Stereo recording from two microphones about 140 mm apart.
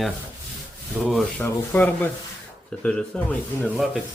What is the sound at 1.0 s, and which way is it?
Speech, 5° left (ahead or behind).